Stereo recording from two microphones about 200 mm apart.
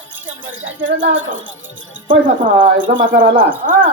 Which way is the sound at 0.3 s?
75° right (ahead or behind).